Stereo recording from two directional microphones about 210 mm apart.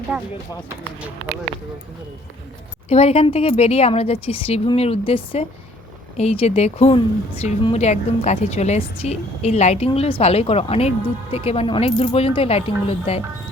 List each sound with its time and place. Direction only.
0.1 s speech: 5° right (ahead or behind)
2.9 s a woman's voice: 30° left (ahead or behind)